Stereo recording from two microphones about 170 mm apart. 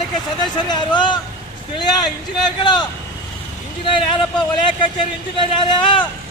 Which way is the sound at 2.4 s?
25° left (ahead or behind).